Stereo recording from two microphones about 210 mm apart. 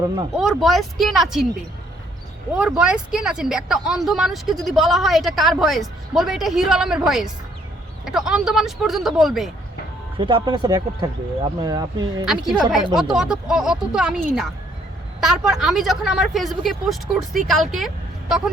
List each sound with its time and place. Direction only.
0.3 s speech: centre (ahead or behind)
2.5 s speech: 5° right (ahead or behind)
10.2 s speech: 20° right (ahead or behind)
12.2 s speech: centre (ahead or behind)